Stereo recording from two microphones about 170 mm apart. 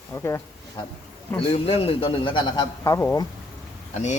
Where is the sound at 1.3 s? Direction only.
35° left (ahead or behind); by 3.2 s 15° left (ahead or behind).